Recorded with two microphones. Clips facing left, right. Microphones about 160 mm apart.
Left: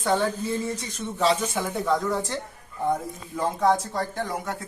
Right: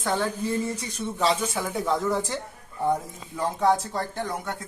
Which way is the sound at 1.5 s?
10° right (ahead or behind).